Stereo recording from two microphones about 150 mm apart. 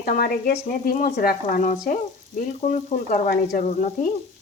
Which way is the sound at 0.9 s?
70° left (ahead or behind).